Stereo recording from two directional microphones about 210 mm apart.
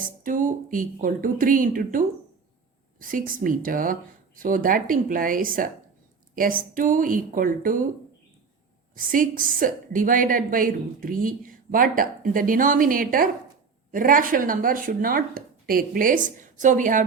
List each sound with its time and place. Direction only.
0.0 s a woman's voice: 40° right (ahead or behind)
9.0 s a woman's voice: 40° right (ahead or behind)